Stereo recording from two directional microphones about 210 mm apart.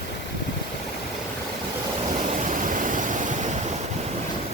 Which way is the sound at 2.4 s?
40° right (ahead or behind).